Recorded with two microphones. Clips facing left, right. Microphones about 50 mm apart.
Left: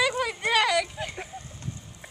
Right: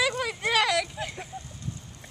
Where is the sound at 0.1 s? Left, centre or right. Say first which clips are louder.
Left 1 dB; centre.